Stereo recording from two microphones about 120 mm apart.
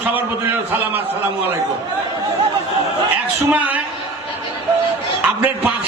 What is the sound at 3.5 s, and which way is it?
Speech, 10° right (ahead or behind).